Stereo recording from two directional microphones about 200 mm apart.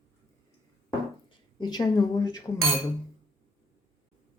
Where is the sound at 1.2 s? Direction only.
20° left (ahead or behind).